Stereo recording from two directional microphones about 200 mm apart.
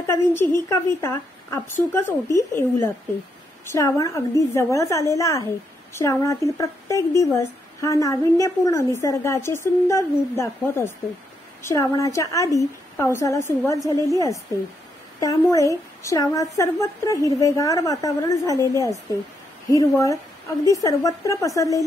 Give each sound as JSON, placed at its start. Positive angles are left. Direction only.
{"t": 0.0, "sound": "a woman's voice", "side_deg": 10}